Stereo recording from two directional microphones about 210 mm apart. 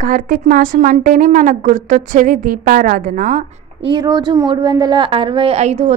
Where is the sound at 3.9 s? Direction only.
20° right (ahead or behind).